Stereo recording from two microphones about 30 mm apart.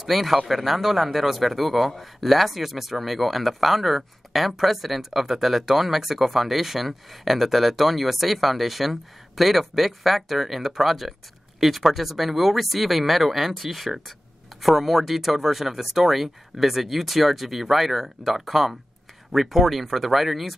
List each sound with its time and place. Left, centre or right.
0.1 s a man's voice: centre